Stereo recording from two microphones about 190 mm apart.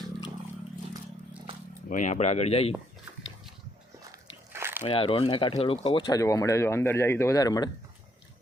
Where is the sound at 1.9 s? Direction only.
40° left (ahead or behind).